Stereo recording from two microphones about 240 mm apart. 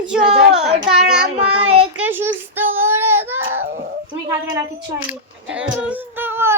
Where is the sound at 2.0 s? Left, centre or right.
Centre.